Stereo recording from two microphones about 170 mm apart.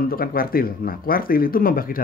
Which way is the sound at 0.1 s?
60° left (ahead or behind).